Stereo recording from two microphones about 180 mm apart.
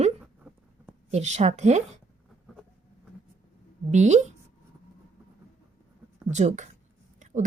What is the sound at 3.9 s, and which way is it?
Speech, 40° right (ahead or behind).